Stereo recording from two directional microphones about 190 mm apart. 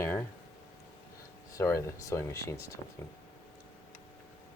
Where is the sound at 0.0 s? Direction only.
15° left (ahead or behind).